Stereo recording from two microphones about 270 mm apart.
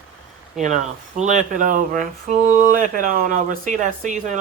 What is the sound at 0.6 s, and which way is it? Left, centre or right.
Speech, right.